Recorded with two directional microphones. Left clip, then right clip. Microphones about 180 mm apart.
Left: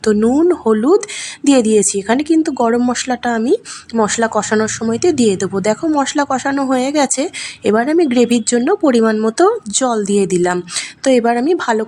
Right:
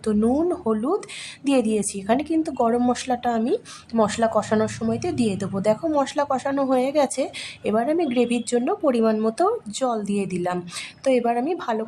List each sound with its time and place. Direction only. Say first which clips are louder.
0.0 s speech: left 9 dB; 20° left (ahead or behind)